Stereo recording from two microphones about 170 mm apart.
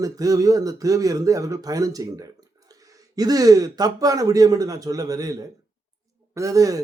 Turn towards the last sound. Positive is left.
turn(degrees=-20)  # may be behind; listen again after turning